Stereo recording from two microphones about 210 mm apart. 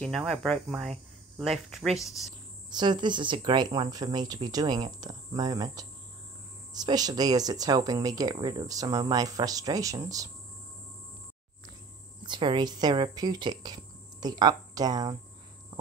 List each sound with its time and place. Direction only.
0.0 s speech: centre (ahead or behind)
2.7 s speech: 20° right (ahead or behind)
12.2 s speech: 20° right (ahead or behind)